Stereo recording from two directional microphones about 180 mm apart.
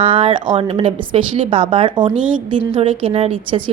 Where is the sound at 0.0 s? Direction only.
30° right (ahead or behind).